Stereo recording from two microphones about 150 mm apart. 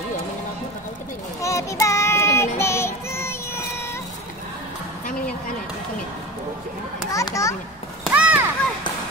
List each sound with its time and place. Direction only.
1.4 s child singing: 20° left (ahead or behind)
2.6 s music: 15° left (ahead or behind)
7.1 s children playing: 20° left (ahead or behind)
8.1 s a sound: 10° right (ahead or behind)